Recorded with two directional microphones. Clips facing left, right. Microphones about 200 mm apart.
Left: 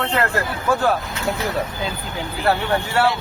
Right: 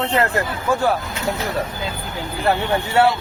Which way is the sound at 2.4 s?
15° right (ahead or behind).